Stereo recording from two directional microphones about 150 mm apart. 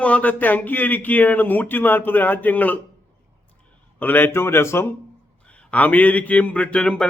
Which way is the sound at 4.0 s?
15° left (ahead or behind).